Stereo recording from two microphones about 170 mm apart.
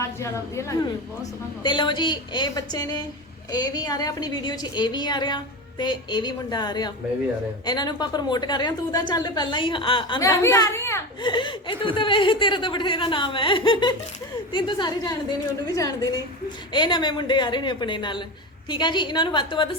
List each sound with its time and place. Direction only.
0.0 s a woman's voice: 15° left (ahead or behind)
1.6 s speech: 30° left (ahead or behind)
10.2 s a woman's voice: 15° left (ahead or behind)
11.2 s speech: 30° left (ahead or behind)